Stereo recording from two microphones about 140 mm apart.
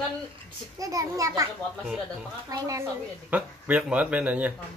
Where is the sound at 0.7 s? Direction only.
25° right (ahead or behind).